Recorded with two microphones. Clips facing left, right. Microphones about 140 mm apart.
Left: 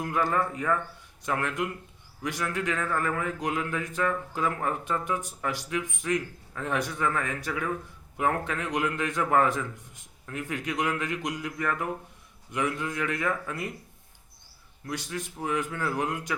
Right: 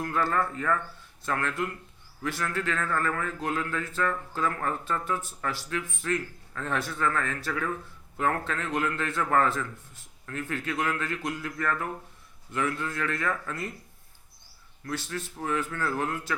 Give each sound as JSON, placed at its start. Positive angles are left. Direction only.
{"t": 0.0, "sound": "speech", "side_deg": 15}
{"t": 14.8, "sound": "speech", "side_deg": 15}